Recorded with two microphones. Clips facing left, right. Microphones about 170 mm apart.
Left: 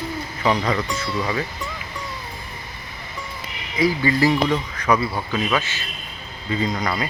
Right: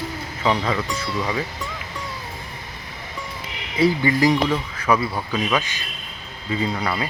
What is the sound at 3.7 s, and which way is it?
Speech, 25° right (ahead or behind).